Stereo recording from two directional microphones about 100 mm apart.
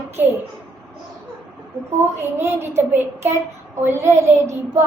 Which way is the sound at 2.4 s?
25° right (ahead or behind).